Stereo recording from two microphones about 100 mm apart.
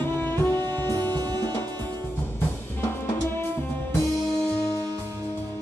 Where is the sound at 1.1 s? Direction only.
40° right (ahead or behind).